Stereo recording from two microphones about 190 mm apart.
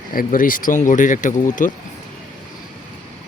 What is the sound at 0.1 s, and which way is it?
Speech, 45° left (ahead or behind).